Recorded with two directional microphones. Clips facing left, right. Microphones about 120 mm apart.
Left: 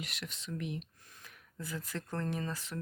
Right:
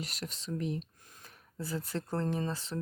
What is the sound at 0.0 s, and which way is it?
Speech, 35° right (ahead or behind).